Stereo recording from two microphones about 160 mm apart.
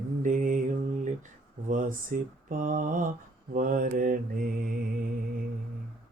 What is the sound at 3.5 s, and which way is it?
Mantra, 60° right (ahead or behind).